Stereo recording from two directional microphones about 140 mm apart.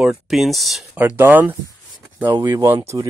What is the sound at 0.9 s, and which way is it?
Speech, 15° right (ahead or behind).